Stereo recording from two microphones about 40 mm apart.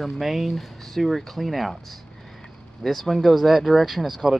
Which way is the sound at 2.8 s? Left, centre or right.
Centre.